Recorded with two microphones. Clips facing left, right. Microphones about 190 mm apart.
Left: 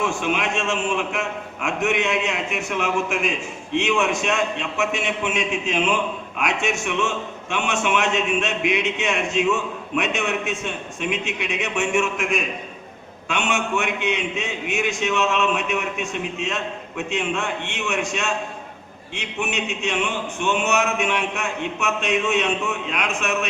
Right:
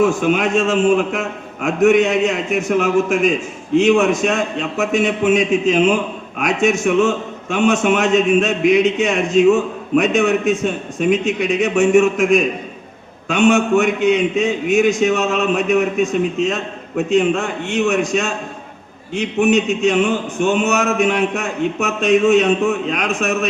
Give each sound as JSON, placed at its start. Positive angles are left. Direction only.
{"t": 0.0, "sound": "a man's voice", "side_deg": -40}